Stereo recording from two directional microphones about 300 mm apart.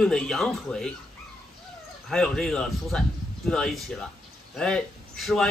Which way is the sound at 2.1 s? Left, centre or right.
Centre.